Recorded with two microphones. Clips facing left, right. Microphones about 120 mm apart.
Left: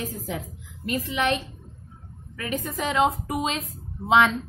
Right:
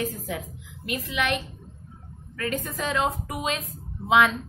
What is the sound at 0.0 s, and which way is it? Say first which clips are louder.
Speech: right 2 dB; 20° left (ahead or behind).